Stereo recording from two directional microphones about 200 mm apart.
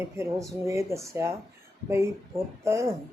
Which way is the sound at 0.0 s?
15° right (ahead or behind).